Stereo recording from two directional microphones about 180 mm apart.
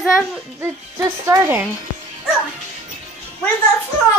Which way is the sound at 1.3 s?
10° right (ahead or behind).